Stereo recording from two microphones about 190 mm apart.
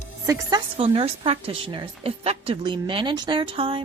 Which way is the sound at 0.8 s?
30° right (ahead or behind).